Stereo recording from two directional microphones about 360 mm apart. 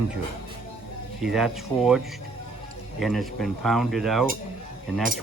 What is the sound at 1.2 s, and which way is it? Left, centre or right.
Speech, centre.